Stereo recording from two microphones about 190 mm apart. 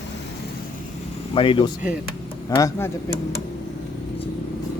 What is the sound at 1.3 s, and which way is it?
Speech, 25° left (ahead or behind).